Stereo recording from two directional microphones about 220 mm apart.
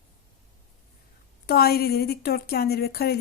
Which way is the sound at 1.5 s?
45° left (ahead or behind).